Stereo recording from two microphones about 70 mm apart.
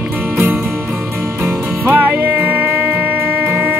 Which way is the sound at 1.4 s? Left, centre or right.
Right.